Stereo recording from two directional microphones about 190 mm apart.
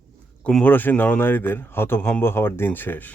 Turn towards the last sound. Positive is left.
turn(degrees=10)  # may be behind; listen again after turning